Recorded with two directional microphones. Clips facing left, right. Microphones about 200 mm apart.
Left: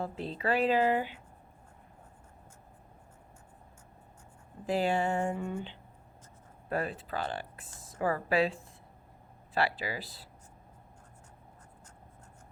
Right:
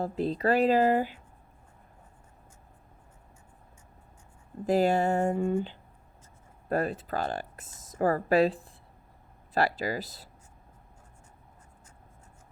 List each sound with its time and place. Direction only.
0.0 s speech: 40° right (ahead or behind)
4.6 s speech: 40° right (ahead or behind)